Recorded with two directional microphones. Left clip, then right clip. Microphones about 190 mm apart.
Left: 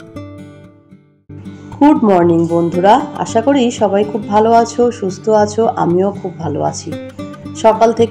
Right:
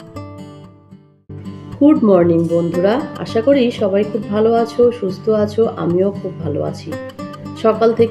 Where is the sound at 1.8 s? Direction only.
15° left (ahead or behind).